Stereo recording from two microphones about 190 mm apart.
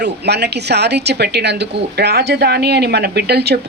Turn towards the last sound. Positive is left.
turn(degrees=-60)  # may be behind; listen again after turning